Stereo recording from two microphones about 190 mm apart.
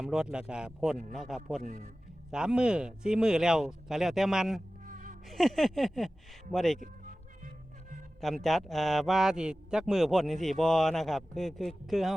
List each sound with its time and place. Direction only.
0.0 s a man's voice: 5° right (ahead or behind)
1.6 s a man's voice: 40° right (ahead or behind)
2.3 s a man's voice: 5° right (ahead or behind)
4.9 s music: 45° right (ahead or behind)
5.3 s a man's voice: centre (ahead or behind)
8.2 s a man's voice: centre (ahead or behind)